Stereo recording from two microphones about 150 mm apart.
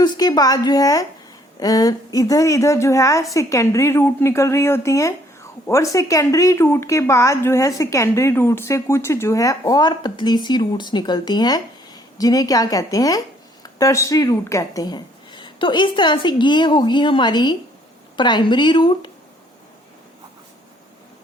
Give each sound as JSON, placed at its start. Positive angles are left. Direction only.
{"t": 0.0, "sound": "a woman's voice", "side_deg": 25}